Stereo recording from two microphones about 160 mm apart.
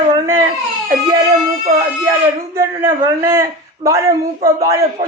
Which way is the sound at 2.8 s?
15° right (ahead or behind).